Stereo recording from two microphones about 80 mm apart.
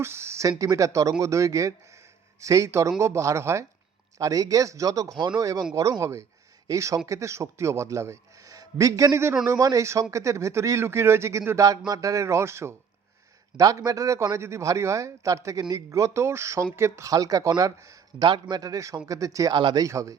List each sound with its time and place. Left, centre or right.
0.0 s speech: right
0.6 s a man's voice: right
4.2 s a man's voice: right
13.6 s a man's voice: right
17.1 s a man's voice: right
18.3 s a man's voice: right
19.5 s speech: right
19.8 s a man's voice: right